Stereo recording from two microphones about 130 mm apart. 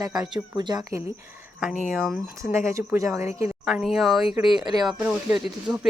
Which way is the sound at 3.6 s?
Centre (ahead or behind).